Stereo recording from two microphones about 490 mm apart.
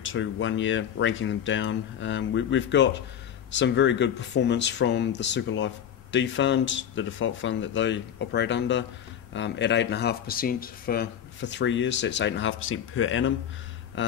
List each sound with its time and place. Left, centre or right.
0.0 s speech: left